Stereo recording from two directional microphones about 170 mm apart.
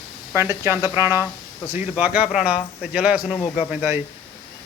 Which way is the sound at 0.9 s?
15° right (ahead or behind).